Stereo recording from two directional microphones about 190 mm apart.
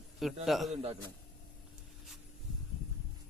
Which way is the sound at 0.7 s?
30° right (ahead or behind).